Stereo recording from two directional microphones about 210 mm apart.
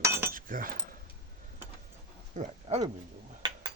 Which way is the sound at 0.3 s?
40° right (ahead or behind).